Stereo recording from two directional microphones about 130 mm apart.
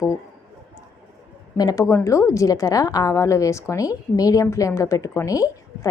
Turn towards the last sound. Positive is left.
turn(degrees=25)  # may be behind; listen again after turning